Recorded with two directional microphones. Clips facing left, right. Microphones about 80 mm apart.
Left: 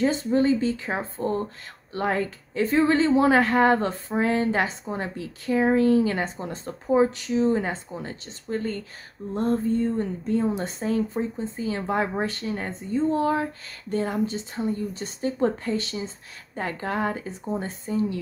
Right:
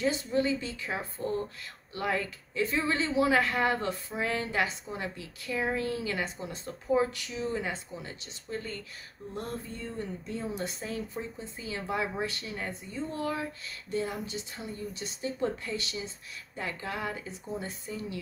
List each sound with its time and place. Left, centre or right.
0.0 s a woman's voice: left